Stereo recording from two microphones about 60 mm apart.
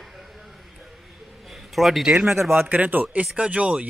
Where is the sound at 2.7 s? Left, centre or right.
Right.